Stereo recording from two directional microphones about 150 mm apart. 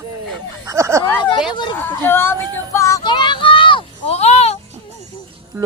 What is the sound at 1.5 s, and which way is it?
Speech, 30° left (ahead or behind).